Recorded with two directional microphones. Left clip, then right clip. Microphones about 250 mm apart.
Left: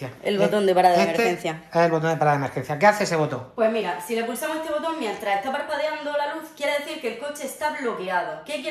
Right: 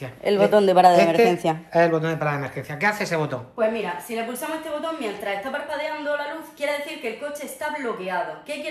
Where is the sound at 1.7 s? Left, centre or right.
Centre.